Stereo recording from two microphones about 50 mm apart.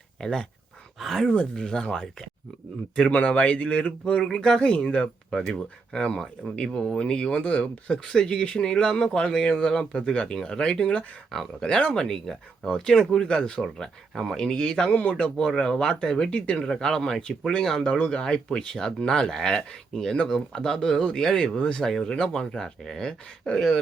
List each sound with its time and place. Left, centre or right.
0.9 s speech: centre
3.1 s speech: left
13.6 s speech: centre